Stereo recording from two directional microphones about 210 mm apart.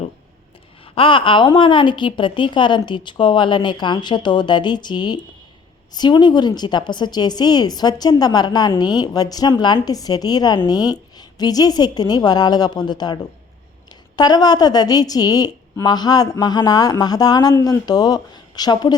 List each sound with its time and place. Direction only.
0.9 s a woman's voice: 25° left (ahead or behind)
14.2 s a woman's voice: 20° left (ahead or behind)